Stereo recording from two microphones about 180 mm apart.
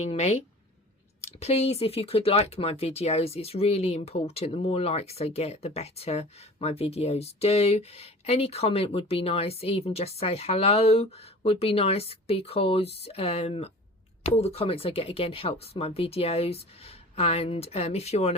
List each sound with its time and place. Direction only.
0.0 s speech: 35° left (ahead or behind)